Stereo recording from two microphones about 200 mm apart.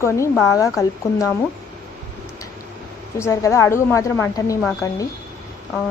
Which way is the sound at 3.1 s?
15° left (ahead or behind).